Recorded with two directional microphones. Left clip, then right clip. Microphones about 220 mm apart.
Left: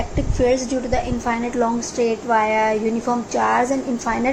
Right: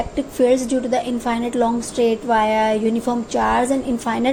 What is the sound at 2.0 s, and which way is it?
A woman's voice, 50° right (ahead or behind).